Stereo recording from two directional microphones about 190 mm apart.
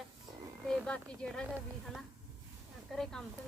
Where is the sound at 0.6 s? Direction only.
5° left (ahead or behind).